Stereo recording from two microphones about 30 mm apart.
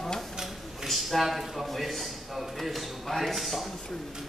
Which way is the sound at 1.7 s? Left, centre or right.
Centre.